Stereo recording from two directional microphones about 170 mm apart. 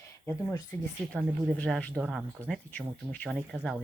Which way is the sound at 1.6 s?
5° left (ahead or behind).